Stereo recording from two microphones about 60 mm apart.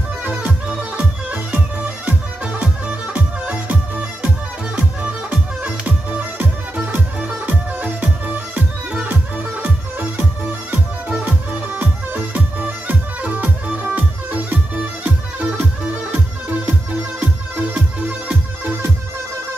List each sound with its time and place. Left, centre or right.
0.2 s music: right
0.5 s music: centre
11.2 s music: right